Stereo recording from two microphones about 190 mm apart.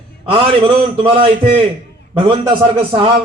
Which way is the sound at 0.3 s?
25° right (ahead or behind).